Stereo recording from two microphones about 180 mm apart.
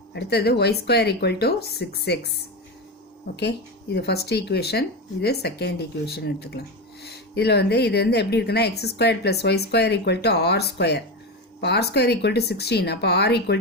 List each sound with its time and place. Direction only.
0.1 s a woman's voice: 65° left (ahead or behind)
3.9 s a woman's voice: 65° left (ahead or behind)